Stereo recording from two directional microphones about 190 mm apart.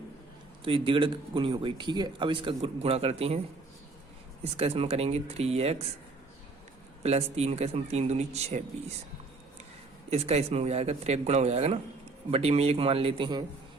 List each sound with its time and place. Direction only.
0.6 s speech: 30° right (ahead or behind)
4.5 s a man's voice: 30° right (ahead or behind)
7.0 s a man's voice: 35° right (ahead or behind)
10.1 s a man's voice: 35° right (ahead or behind)